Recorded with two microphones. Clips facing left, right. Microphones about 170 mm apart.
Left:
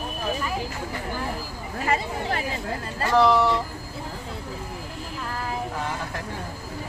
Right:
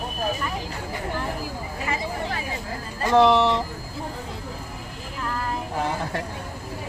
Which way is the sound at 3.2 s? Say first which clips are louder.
Right 2 dB; 25° right (ahead or behind).